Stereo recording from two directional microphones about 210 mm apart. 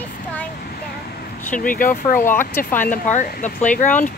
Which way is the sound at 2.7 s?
40° left (ahead or behind).